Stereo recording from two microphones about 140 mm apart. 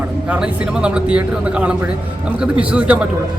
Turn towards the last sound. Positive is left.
turn(degrees=-10)  # may be behind; listen again after turning